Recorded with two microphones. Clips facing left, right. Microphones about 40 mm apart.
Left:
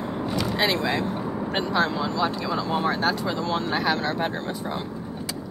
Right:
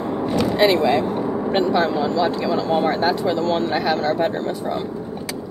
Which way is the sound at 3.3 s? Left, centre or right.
Right.